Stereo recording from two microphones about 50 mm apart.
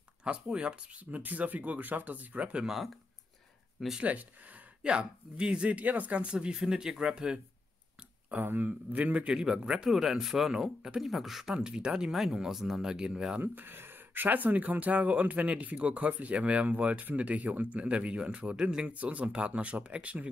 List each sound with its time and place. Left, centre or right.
0.2 s speech: centre
2.6 s speech: centre
4.0 s speech: right
4.8 s speech: centre
6.2 s speech: centre
8.5 s speech: right
9.3 s speech: centre
11.5 s speech: centre
13.4 s speech: right